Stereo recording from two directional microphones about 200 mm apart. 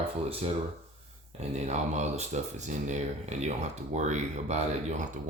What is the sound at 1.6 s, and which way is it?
Speech, 35° right (ahead or behind).